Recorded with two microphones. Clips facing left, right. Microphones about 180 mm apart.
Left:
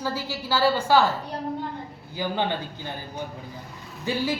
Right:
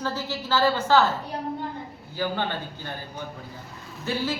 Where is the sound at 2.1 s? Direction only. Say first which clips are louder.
Left 1 dB; 15° left (ahead or behind).